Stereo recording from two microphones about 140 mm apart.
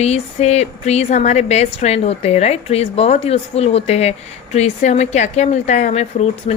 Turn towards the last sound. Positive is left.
turn(degrees=50)  # may be behind; listen again after turning